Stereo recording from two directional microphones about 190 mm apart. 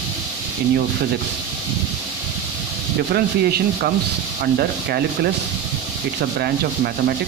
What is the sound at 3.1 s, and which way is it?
Speech, 55° right (ahead or behind).